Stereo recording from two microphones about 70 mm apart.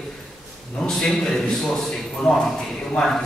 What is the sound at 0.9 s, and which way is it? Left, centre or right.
Speech, centre.